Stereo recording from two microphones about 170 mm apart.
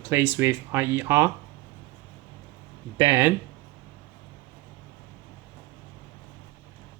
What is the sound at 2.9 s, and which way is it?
Speech, 15° right (ahead or behind).